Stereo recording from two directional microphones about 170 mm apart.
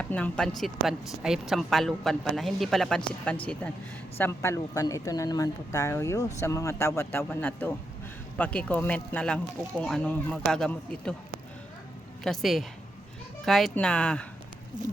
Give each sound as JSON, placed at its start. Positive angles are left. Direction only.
{"t": 0.0, "sound": "speech", "side_deg": 5}
{"t": 12.2, "sound": "speech", "side_deg": 0}